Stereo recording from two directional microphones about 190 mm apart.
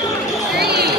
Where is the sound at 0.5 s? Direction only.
55° right (ahead or behind).